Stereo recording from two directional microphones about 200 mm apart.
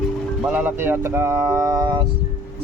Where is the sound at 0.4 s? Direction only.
10° right (ahead or behind).